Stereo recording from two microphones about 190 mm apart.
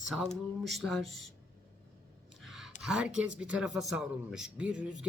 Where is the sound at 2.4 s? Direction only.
Centre (ahead or behind).